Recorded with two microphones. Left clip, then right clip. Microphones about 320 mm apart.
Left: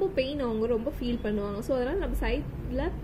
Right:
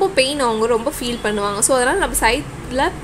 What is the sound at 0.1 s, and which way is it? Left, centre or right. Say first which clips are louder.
A woman's voice: right 13 dB; centre.